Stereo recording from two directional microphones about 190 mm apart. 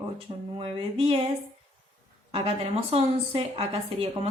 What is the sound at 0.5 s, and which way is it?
Speech, 30° right (ahead or behind).